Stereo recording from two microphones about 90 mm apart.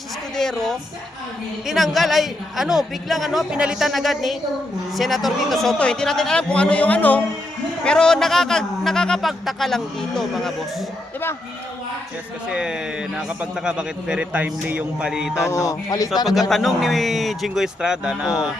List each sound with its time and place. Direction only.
0.3 s a man's voice: 5° left (ahead or behind)
12.5 s a man's voice: 10° right (ahead or behind)
15.4 s music: 35° left (ahead or behind)
16.2 s a man's voice: centre (ahead or behind)